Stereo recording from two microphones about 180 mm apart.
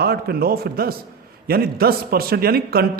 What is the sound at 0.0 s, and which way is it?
A man's voice, 60° right (ahead or behind).